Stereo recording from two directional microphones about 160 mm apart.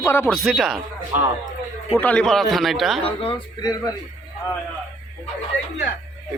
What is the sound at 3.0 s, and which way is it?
Speech, 35° left (ahead or behind).